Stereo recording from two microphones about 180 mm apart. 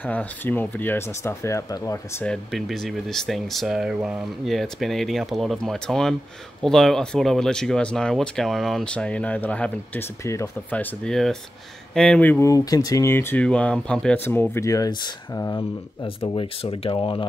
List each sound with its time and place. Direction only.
0.0 s speech: 10° left (ahead or behind)
2.2 s speech: centre (ahead or behind); by 17.3 s 30° left (ahead or behind)